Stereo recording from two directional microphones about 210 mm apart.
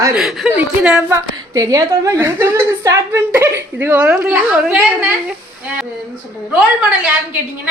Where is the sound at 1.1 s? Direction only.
15° right (ahead or behind).